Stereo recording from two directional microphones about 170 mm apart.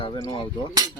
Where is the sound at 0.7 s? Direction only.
20° right (ahead or behind).